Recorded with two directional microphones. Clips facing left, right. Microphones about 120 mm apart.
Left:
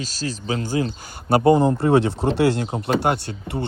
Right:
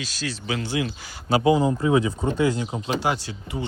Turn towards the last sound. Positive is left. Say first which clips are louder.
# left 4 dB
turn(degrees=60)  # may be behind; listen again after turning